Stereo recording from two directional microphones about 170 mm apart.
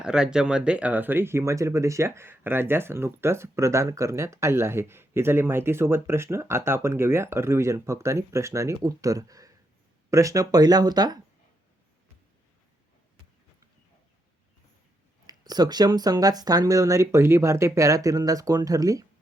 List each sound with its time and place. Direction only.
0.0 s speech: 5° right (ahead or behind); by 11.2 s 25° right (ahead or behind)
15.3 s speech: 25° right (ahead or behind)